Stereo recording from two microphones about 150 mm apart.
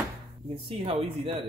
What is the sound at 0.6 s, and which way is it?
Speech, 40° right (ahead or behind).